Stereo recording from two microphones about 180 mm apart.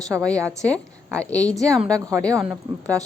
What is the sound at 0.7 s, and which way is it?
Speech, 5° left (ahead or behind).